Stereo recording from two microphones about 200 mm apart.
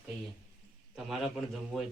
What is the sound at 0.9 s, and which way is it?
Speech, centre (ahead or behind).